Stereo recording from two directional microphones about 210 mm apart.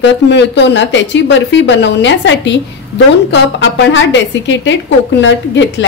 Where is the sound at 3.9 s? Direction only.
60° left (ahead or behind).